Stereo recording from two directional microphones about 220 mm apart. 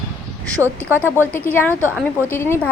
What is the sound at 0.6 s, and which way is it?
Speech, 10° right (ahead or behind).